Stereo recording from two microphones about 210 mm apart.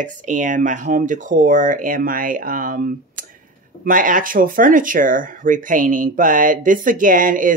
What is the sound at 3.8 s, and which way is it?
Speech, 40° right (ahead or behind).